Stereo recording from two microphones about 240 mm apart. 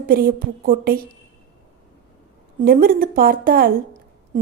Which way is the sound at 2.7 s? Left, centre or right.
Right.